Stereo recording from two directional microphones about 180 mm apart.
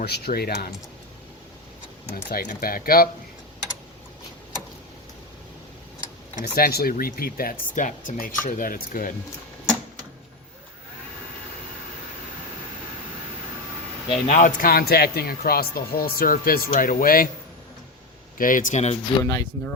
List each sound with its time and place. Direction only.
0.0 s speech: 60° left (ahead or behind)
2.1 s speech: 65° left (ahead or behind)
2.5 s speech: 55° left (ahead or behind)
6.4 s speech: 60° left (ahead or behind)
14.1 s speech: 45° left (ahead or behind)
18.3 s speech: 50° left (ahead or behind)
19.2 s speech: 15° left (ahead or behind)